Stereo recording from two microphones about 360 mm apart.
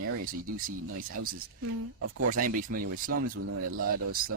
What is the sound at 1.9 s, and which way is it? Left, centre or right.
Speech, right.